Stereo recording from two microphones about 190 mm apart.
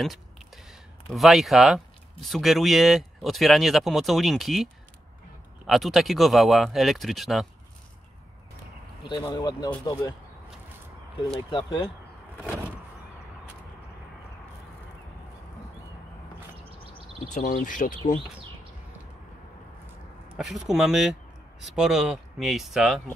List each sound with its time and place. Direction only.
1.0 s speech: centre (ahead or behind)
5.7 s speech: centre (ahead or behind)
9.2 s speech: 20° left (ahead or behind)
11.2 s speech: 30° left (ahead or behind)
17.3 s speech: 40° left (ahead or behind)
20.3 s speech: centre (ahead or behind)